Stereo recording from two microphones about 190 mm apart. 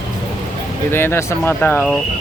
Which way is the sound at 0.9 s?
10° left (ahead or behind).